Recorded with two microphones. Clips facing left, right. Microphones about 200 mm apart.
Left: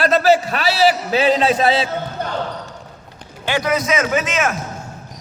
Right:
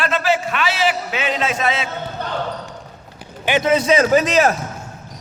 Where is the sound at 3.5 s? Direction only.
25° right (ahead or behind).